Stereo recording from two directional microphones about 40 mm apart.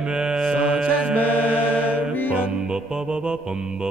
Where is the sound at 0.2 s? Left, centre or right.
Right.